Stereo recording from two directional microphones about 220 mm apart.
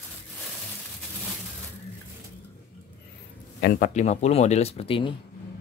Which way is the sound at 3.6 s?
40° left (ahead or behind).